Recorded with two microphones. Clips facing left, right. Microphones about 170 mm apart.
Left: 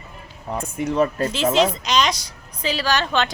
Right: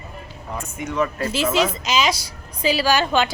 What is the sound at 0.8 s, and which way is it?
Speech, 35° left (ahead or behind).